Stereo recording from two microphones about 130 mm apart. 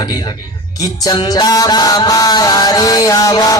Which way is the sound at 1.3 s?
30° left (ahead or behind).